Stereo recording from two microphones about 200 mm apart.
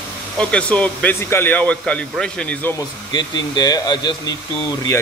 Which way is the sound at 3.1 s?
20° left (ahead or behind).